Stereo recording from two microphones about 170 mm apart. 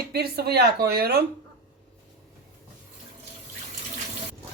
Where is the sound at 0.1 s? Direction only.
70° right (ahead or behind).